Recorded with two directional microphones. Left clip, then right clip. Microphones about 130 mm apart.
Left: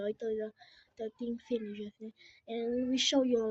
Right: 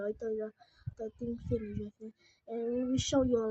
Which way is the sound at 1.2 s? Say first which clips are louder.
Even; centre (ahead or behind).